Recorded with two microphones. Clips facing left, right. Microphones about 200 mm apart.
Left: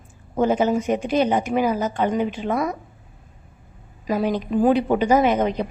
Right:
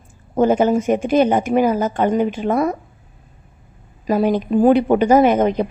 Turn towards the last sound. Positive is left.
turn(degrees=-50)  # may be behind; listen again after turning